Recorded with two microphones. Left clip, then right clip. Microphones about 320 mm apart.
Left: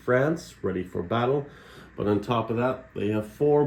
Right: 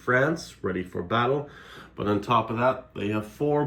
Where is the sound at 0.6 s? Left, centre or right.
Right.